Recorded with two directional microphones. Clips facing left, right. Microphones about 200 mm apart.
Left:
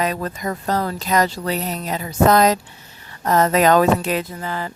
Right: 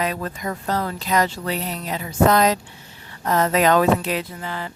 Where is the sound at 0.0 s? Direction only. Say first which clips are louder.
Left 2 dB; 40° left (ahead or behind).